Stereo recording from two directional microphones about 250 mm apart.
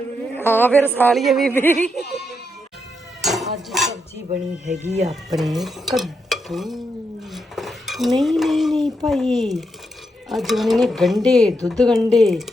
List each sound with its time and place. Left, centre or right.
0.3 s a man's voice: centre
3.2 s a sound: centre
4.3 s speech: right
5.4 s stir: centre
7.3 s dishes: centre
9.0 s speech: centre